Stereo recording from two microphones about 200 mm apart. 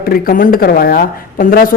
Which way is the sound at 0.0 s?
45° left (ahead or behind).